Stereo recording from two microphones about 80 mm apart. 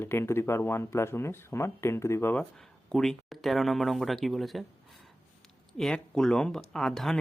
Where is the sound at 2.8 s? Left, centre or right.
Centre.